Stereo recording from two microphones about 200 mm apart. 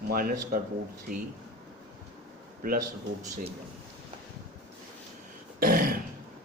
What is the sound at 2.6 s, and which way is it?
Speech, 45° right (ahead or behind).